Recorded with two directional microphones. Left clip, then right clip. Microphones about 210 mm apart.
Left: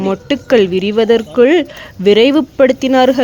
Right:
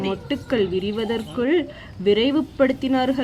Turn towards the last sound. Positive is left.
turn(degrees=45)  # may be behind; listen again after turning